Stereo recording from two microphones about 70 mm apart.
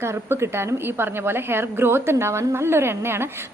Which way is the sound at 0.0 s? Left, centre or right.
Right.